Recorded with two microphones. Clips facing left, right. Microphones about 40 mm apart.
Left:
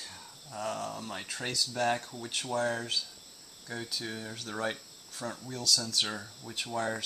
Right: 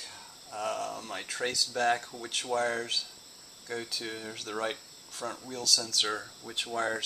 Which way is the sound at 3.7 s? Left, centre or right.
Centre.